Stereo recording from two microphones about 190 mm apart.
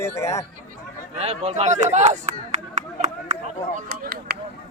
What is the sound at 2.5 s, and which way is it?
Clapping, 40° right (ahead or behind).